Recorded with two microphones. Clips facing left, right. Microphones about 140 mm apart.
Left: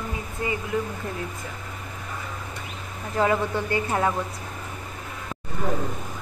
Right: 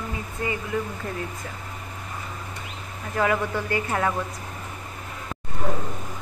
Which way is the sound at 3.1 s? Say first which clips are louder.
Left 1 dB; 25° left (ahead or behind).